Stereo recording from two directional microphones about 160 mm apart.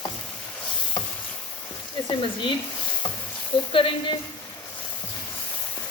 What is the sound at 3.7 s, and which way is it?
Speech, 35° left (ahead or behind).